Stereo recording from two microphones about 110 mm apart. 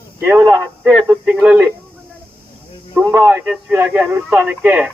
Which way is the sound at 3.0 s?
30° right (ahead or behind).